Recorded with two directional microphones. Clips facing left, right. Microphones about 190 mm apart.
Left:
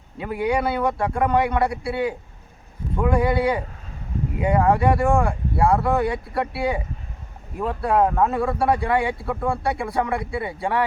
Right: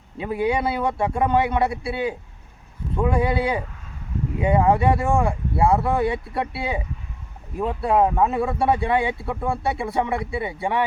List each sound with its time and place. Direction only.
0.2 s a man's voice: 25° right (ahead or behind)